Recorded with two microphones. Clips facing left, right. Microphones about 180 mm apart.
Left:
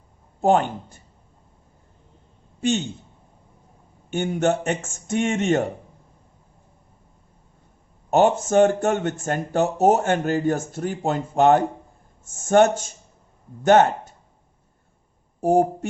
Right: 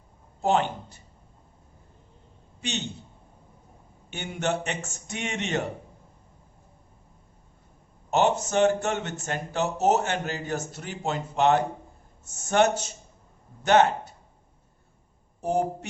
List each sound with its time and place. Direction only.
0.4 s speech: 50° left (ahead or behind)
2.6 s a man's voice: 45° left (ahead or behind)
4.1 s speech: 45° left (ahead or behind)
8.1 s speech: 50° left (ahead or behind)
15.4 s speech: 45° left (ahead or behind)